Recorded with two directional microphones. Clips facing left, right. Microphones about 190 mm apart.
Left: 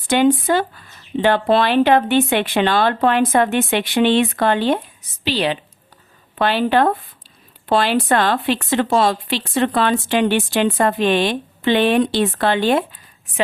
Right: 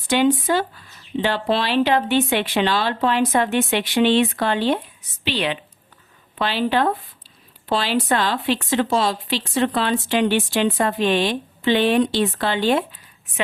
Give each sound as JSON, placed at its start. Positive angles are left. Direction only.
{"t": 0.1, "sound": "speech", "side_deg": 50}
{"t": 5.2, "sound": "a woman's voice", "side_deg": 35}
{"t": 6.4, "sound": "speech", "side_deg": 55}